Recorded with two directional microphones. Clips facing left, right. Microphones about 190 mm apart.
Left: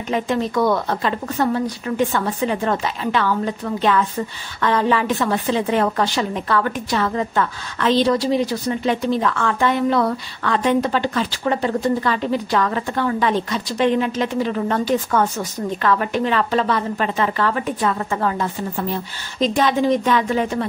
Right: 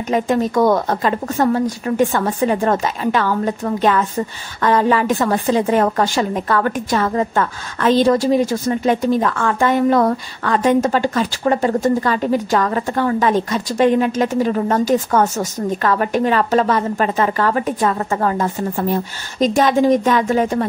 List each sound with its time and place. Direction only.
0.1 s a woman's voice: 45° right (ahead or behind)